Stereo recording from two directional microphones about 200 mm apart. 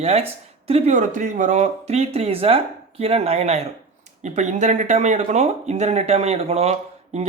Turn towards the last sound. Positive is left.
turn(degrees=-35)  # may be behind; listen again after turning